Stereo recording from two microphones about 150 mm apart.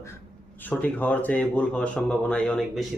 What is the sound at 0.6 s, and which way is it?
Speech, 10° left (ahead or behind).